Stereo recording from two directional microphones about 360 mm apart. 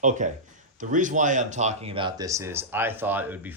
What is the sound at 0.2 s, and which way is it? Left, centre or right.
Speech, centre.